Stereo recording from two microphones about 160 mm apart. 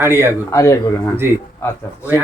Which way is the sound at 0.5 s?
20° left (ahead or behind).